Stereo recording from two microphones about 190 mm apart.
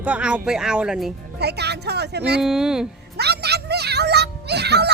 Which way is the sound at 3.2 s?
60° right (ahead or behind).